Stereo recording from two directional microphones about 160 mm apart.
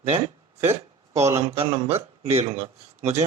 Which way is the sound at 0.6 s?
40° right (ahead or behind).